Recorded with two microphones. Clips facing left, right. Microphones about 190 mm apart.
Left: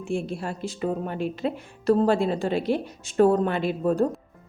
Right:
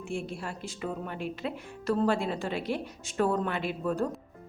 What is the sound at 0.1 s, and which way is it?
Speech, 30° left (ahead or behind).